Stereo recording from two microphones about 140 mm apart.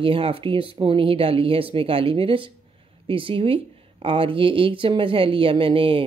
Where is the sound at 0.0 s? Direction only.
40° right (ahead or behind).